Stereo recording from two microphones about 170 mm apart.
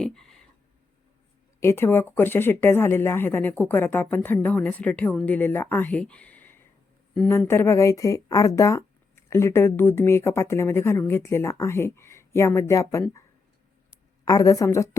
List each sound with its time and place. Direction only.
0.0 s a sound: 5° left (ahead or behind)
1.6 s speech: 15° left (ahead or behind)
14.3 s a woman's voice: 20° left (ahead or behind)